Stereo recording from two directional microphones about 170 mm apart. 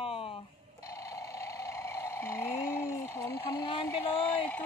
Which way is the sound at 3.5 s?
25° left (ahead or behind).